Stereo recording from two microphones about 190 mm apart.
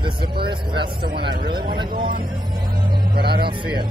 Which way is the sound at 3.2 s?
55° right (ahead or behind).